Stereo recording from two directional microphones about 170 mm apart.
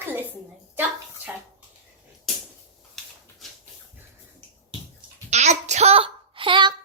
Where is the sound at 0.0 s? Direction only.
10° right (ahead or behind).